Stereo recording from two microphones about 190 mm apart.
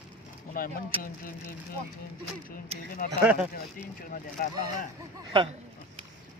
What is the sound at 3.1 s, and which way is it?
Speech, 10° right (ahead or behind).